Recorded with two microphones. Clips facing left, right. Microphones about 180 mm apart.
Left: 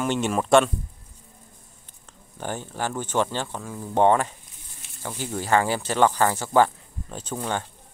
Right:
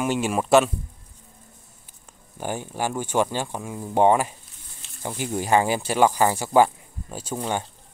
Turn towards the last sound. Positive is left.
turn(degrees=-15)  # may be behind; listen again after turning